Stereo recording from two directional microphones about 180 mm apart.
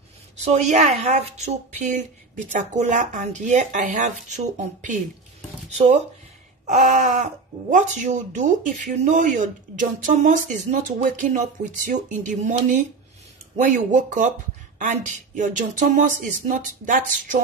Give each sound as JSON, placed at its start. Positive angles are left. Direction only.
{"t": 0.5, "sound": "a woman's voice", "side_deg": -40}
{"t": 5.7, "sound": "speech", "side_deg": -40}